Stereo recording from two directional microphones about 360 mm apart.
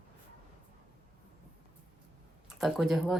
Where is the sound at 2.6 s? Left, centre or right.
Centre.